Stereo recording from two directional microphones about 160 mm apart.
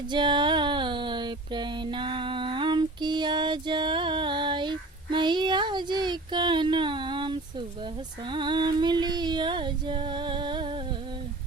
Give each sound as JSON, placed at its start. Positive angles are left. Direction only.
{"t": 0.1, "sound": "music", "side_deg": -30}
{"t": 8.3, "sound": "female singing", "side_deg": -30}